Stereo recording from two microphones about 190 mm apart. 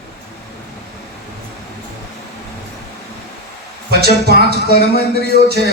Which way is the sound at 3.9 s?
55° right (ahead or behind).